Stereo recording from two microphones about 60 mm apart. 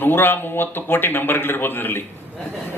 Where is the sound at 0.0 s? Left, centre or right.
Left.